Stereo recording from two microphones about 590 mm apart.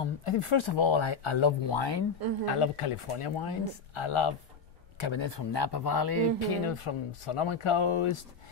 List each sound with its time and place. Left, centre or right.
0.0 s speech: left
2.4 s speech: left
6.7 s speech: left